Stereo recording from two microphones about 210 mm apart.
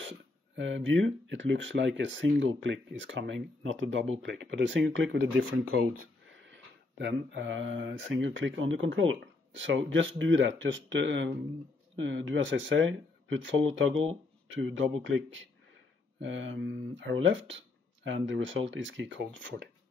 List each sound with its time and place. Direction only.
0.6 s speech: 65° right (ahead or behind)